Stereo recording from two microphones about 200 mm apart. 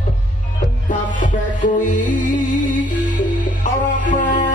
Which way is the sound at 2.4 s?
40° left (ahead or behind).